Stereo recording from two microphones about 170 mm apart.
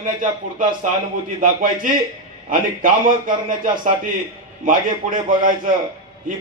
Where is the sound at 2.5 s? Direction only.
50° right (ahead or behind).